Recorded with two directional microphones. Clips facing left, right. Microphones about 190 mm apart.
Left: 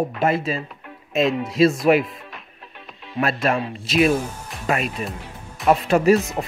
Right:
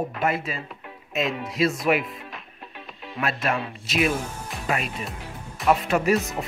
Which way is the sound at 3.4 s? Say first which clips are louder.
Left 5 dB; 30° left (ahead or behind).